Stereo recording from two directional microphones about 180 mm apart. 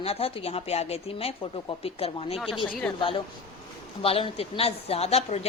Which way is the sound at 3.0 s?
30° left (ahead or behind).